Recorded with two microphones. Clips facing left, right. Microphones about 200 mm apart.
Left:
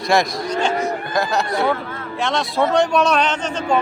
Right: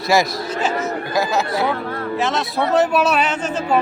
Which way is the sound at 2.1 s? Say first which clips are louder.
Left 2 dB; 5° right (ahead or behind).